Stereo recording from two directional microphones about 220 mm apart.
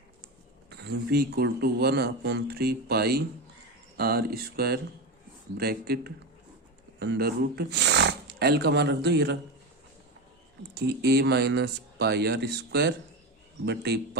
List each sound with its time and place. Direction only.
0.7 s speech: 45° right (ahead or behind)
10.8 s speech: 45° right (ahead or behind)